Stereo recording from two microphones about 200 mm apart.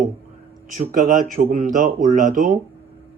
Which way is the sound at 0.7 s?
40° right (ahead or behind).